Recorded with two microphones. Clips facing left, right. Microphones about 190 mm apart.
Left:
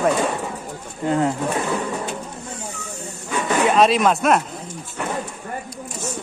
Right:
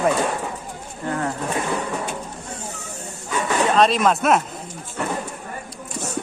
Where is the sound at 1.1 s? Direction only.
20° left (ahead or behind).